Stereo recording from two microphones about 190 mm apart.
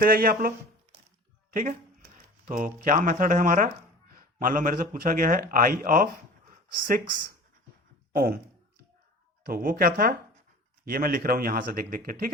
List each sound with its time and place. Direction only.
0.0 s a man's voice: 50° right (ahead or behind)
2.5 s a man's voice: 45° right (ahead or behind)
8.1 s speech: 50° right (ahead or behind)
9.5 s a man's voice: 50° right (ahead or behind)